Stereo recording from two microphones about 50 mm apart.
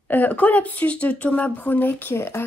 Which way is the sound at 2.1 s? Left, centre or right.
Left.